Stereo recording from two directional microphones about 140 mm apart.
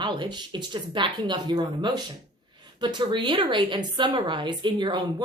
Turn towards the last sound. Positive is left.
turn(degrees=-35)  # may be behind; listen again after turning